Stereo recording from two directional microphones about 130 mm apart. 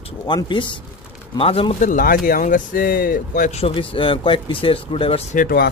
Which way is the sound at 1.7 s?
85° left.